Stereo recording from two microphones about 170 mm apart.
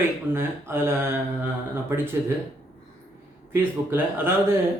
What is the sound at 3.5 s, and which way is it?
Speech, 10° right (ahead or behind).